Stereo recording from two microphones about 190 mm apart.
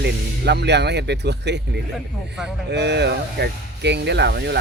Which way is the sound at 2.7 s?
65° right (ahead or behind).